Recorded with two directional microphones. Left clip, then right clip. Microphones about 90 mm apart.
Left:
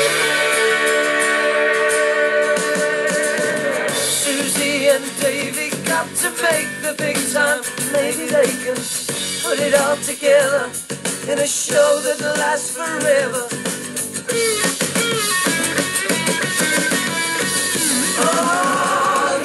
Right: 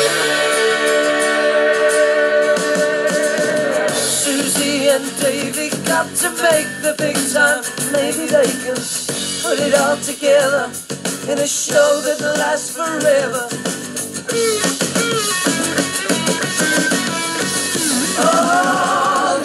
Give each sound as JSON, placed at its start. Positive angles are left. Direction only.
{"t": 0.0, "sound": "music", "side_deg": -25}
{"t": 14.3, "sound": "music", "side_deg": -25}